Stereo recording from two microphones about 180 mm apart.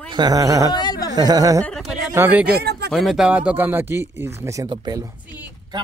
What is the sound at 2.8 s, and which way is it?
Speech, centre (ahead or behind).